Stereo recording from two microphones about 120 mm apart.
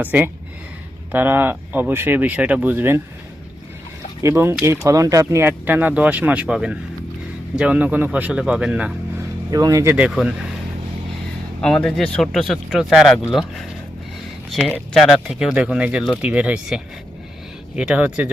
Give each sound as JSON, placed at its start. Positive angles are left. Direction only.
{"t": 0.0, "sound": "speech", "side_deg": -15}
{"t": 4.2, "sound": "speech", "side_deg": -20}
{"t": 9.5, "sound": "speech", "side_deg": -30}
{"t": 9.9, "sound": "speech", "side_deg": -10}
{"t": 11.6, "sound": "speech", "side_deg": 5}
{"t": 14.9, "sound": "speech", "side_deg": 5}